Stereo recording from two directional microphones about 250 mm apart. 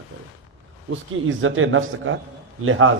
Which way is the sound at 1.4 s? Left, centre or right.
Right.